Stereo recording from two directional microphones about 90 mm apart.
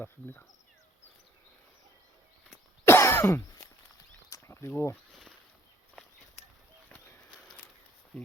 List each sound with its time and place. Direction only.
0.0 s speech: 25° left (ahead or behind)
2.8 s throat clearing: 25° left (ahead or behind)
4.3 s a sound: 30° left (ahead or behind)
8.1 s speech: 10° left (ahead or behind)